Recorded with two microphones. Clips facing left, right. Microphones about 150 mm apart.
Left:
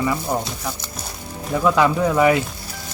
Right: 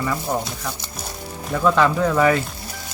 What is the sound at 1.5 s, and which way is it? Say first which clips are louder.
Speech: left 1 dB; 10° left (ahead or behind).